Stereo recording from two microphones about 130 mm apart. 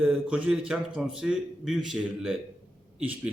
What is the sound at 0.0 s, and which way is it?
A man's voice, 10° right (ahead or behind).